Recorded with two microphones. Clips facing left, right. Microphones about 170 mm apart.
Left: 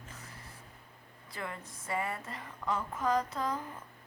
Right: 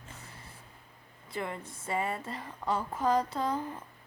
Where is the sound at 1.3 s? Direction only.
25° right (ahead or behind).